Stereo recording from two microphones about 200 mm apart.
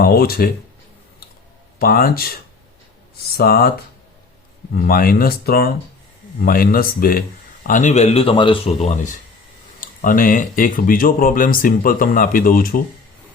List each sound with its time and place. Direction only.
0.0 s speech: 50° left (ahead or behind)
1.8 s speech: 45° left (ahead or behind)
4.7 s speech: 45° left (ahead or behind)